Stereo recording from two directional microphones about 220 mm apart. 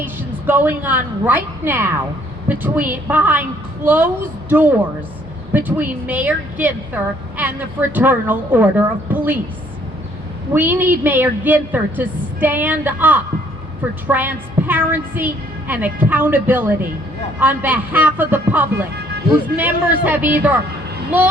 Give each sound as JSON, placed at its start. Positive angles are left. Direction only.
{"t": 0.0, "sound": "a sound", "side_deg": -10}
{"t": 0.8, "sound": "a woman's voice", "side_deg": -10}
{"t": 10.5, "sound": "a woman's voice", "side_deg": -10}